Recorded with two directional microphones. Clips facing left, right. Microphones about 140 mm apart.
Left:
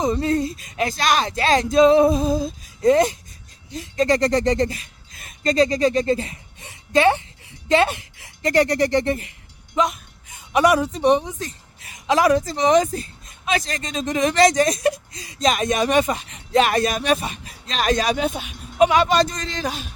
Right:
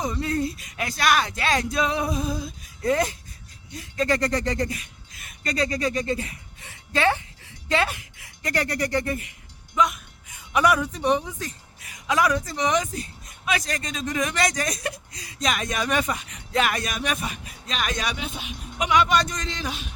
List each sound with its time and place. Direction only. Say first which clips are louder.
0.0 s a woman's voice: left 5 dB; 25° left (ahead or behind)